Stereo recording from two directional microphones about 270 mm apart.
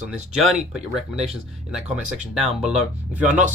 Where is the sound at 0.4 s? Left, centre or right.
Centre.